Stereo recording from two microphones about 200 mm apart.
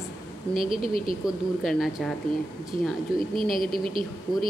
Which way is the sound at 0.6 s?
30° right (ahead or behind).